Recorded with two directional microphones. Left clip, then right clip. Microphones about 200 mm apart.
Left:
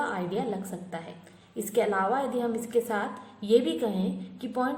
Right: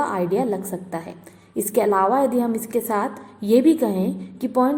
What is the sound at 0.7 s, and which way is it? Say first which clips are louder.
A woman's voice: right 8 dB; 40° right (ahead or behind).